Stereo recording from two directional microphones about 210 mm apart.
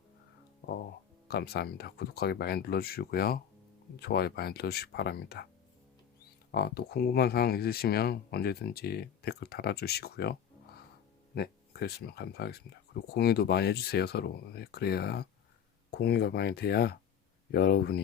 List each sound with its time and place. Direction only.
1.3 s speech: 50° left (ahead or behind)
6.5 s speech: 50° left (ahead or behind)
11.3 s speech: 50° left (ahead or behind)